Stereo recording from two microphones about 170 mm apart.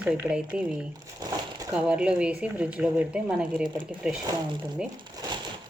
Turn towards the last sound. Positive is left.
turn(degrees=-20)  # may be behind; listen again after turning